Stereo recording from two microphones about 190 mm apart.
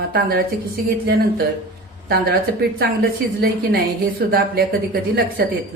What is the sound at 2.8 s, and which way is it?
A woman's voice, 55° right (ahead or behind).